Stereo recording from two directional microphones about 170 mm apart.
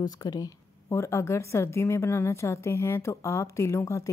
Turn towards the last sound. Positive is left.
turn(degrees=20)  # may be behind; listen again after turning